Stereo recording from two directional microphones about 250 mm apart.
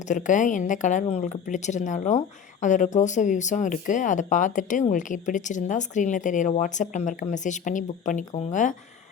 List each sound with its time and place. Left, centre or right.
0.1 s speech: left